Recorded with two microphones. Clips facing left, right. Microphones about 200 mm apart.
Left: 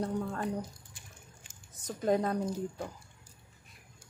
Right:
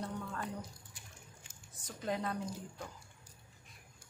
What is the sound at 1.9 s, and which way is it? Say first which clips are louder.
Speech: left 9 dB; 45° left (ahead or behind).